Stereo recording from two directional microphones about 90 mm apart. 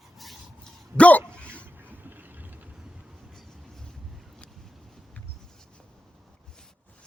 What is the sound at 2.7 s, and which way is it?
Boat, 5° right (ahead or behind).